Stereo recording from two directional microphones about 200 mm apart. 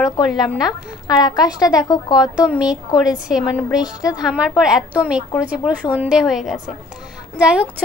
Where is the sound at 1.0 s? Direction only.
20° left (ahead or behind).